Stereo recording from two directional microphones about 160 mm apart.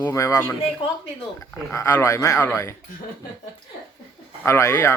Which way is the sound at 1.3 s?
20° left (ahead or behind).